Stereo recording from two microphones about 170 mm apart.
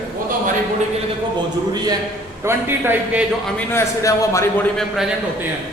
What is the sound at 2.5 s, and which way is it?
Speech, 15° right (ahead or behind).